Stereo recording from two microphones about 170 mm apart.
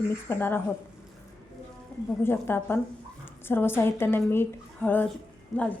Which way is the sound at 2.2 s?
15° left (ahead or behind).